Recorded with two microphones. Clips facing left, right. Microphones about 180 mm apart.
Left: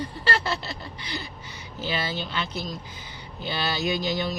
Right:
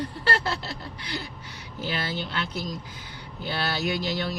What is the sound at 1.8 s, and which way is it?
Speech, 90° left.